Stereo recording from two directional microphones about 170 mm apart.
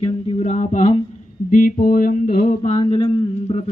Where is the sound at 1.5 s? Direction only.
55° left (ahead or behind).